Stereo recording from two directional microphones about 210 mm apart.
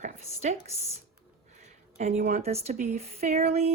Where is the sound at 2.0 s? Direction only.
35° right (ahead or behind).